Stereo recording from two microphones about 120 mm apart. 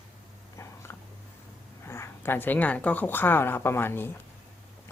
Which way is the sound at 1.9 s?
20° left (ahead or behind).